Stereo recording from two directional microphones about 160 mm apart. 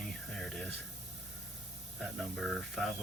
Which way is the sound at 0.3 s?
5° left (ahead or behind).